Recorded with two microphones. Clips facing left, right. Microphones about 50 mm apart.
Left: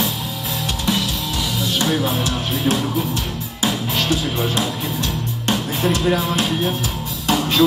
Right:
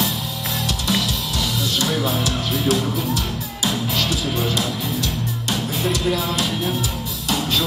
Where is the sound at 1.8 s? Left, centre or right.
Left.